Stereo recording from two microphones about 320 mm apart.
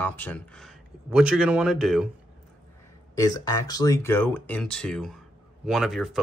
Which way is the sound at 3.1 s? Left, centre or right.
Centre.